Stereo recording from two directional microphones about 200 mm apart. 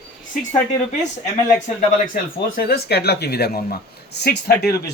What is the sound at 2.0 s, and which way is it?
A man's voice, 50° left (ahead or behind).